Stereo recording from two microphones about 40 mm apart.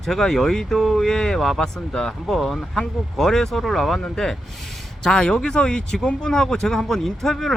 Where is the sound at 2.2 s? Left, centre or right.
Centre.